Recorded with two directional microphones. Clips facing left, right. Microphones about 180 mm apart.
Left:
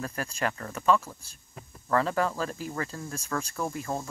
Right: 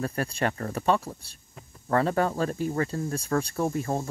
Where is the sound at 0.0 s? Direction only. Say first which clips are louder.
Right 4 dB; 35° right (ahead or behind).